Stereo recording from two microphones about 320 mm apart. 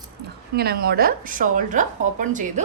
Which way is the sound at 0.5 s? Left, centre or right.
Right.